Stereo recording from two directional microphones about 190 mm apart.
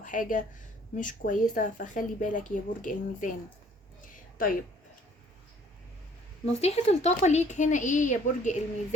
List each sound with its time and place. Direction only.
0.0 s speech: 45° left (ahead or behind)
4.1 s a sound: 45° left (ahead or behind)
6.4 s a woman's voice: 35° left (ahead or behind)